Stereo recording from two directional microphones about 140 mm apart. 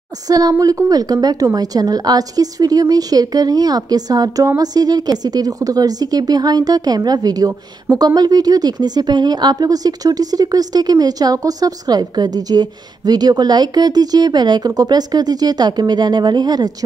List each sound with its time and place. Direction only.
0.3 s a woman's voice: 25° right (ahead or behind)